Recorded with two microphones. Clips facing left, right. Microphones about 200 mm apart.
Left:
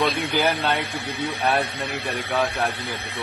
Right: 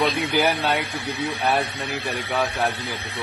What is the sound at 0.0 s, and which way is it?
Speech, 5° right (ahead or behind).